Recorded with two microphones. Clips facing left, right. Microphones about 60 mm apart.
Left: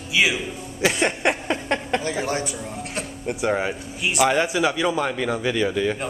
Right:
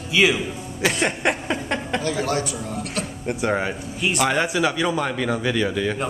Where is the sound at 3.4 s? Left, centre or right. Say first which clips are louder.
Even; centre.